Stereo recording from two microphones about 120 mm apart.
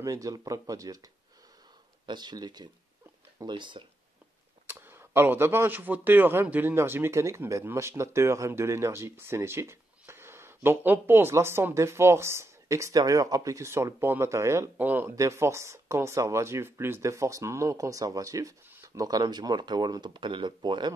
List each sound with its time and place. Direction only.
0.0 s speech: 30° right (ahead or behind)
2.0 s speech: 35° right (ahead or behind)
4.6 s speech: 15° right (ahead or behind); by 20.9 s 40° right (ahead or behind)